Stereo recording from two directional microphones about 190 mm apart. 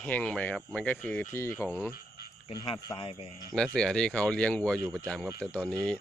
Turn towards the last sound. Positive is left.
turn(degrees=0)  # may be behind; listen again after turning